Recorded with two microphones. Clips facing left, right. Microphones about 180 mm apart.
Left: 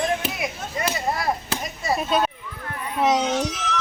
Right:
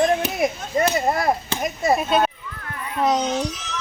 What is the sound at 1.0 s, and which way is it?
Speech, 50° right (ahead or behind).